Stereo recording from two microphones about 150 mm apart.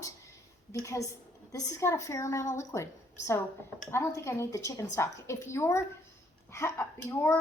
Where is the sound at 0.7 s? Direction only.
20° left (ahead or behind).